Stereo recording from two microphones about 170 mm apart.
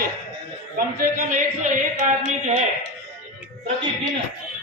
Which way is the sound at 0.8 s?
55° right (ahead or behind).